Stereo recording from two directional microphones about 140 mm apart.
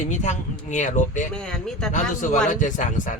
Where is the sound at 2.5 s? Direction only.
65° left (ahead or behind).